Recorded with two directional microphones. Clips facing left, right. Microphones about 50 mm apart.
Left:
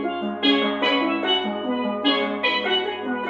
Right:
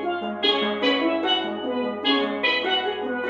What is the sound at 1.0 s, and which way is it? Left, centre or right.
Music, left.